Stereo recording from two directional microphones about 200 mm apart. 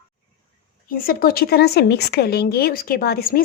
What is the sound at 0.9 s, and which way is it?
Speech, 45° left (ahead or behind).